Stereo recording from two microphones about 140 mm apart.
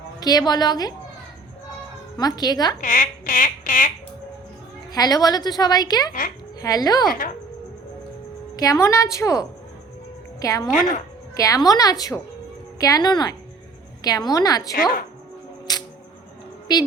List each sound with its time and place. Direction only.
0.2 s a woman's voice: 25° left (ahead or behind)
2.1 s a woman's voice: 30° left (ahead or behind)
2.8 s a sound: 75° left (ahead or behind)
4.9 s a woman's voice: 30° left (ahead or behind)
7.1 s speech: 90° left
8.5 s a woman's voice: 25° left (ahead or behind)
15.7 s camera: 25° left (ahead or behind)
16.7 s speech: 30° left (ahead or behind)